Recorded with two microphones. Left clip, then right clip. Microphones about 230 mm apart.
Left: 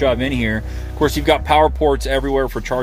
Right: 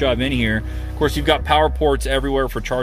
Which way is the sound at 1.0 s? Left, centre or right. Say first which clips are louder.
Left 2 dB; centre.